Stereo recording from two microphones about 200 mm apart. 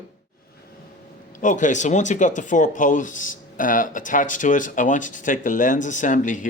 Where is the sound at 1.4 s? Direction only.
40° left (ahead or behind).